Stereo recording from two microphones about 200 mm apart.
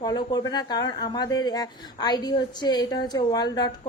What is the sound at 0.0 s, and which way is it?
A woman's voice, 20° left (ahead or behind).